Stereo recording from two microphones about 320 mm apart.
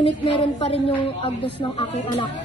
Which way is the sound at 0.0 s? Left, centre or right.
Centre.